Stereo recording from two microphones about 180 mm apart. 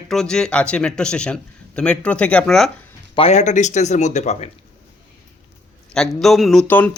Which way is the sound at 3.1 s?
35° left (ahead or behind).